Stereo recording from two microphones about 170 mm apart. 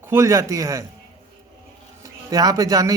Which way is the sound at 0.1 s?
15° right (ahead or behind).